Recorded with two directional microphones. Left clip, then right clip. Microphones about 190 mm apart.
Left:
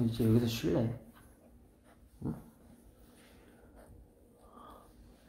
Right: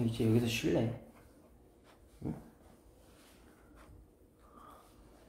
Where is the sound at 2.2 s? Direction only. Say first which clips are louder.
Left 1 dB; 20° left (ahead or behind).